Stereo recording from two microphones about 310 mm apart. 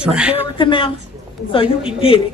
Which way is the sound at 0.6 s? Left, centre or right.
Centre.